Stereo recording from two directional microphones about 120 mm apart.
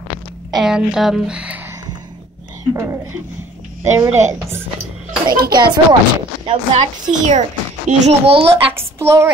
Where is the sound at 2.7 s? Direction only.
20° right (ahead or behind).